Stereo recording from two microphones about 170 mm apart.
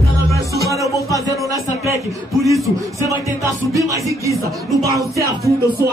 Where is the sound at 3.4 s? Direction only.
20° right (ahead or behind).